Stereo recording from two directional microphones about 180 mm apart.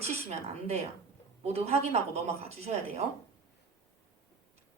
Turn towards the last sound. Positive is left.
turn(degrees=-35)  # may be behind; listen again after turning